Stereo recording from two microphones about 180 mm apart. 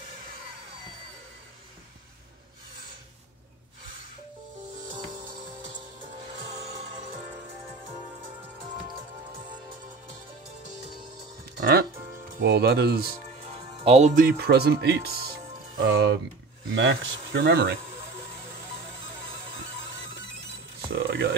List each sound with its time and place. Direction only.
11.4 s music: 60° right (ahead or behind)
12.4 s speech: 60° right (ahead or behind)
13.8 s speech: 40° right (ahead or behind); by 16.2 s 60° right (ahead or behind)
16.6 s speech: 90° right; by 17.7 s 65° right (ahead or behind)
20.9 s a sound: 60° right (ahead or behind)